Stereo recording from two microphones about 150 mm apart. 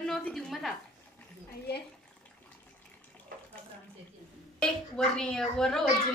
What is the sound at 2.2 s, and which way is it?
Water tap, 10° left (ahead or behind).